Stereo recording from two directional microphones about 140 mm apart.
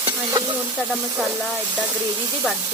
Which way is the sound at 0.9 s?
5° right (ahead or behind).